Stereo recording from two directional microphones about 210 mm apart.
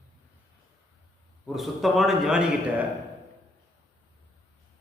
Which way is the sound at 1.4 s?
Centre (ahead or behind).